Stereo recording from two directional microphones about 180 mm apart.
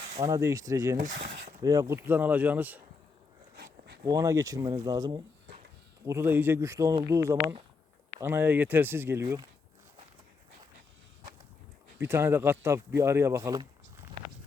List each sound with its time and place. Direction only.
0.2 s speech: 20° right (ahead or behind)
0.9 s speech: 45° right (ahead or behind)
1.6 s speech: 20° right (ahead or behind)
3.5 s a sound: 65° right (ahead or behind)
4.0 s speech: 20° right (ahead or behind)
12.0 s speech: 15° right (ahead or behind)